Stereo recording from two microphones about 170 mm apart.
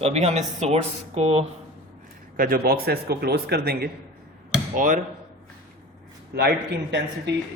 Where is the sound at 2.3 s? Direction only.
60° right (ahead or behind).